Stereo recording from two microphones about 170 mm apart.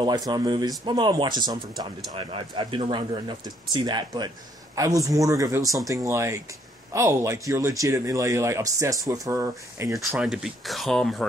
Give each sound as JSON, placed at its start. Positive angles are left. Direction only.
{"t": 0.0, "sound": "speech", "side_deg": -25}
{"t": 9.9, "sound": "speech", "side_deg": 0}